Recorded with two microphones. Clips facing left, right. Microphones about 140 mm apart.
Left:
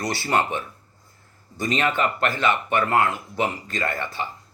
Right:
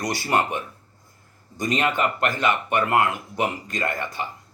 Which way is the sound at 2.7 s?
15° right (ahead or behind).